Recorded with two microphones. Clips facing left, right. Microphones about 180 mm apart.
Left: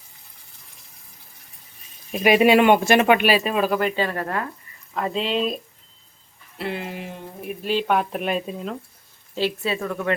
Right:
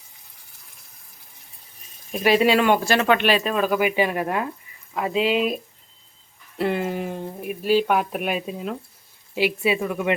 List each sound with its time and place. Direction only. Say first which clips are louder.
2.2 s speech: left 3 dB; 15° left (ahead or behind)
3.2 s speech: left 1 dB; 5° left (ahead or behind)
3.8 s speech: right 2 dB; 10° right (ahead or behind)
4.9 s speech: right 2 dB; 5° right (ahead or behind)
6.6 s speech: right 6 dB; 45° right (ahead or behind)
7.4 s speech: right 3 dB; 5° right (ahead or behind)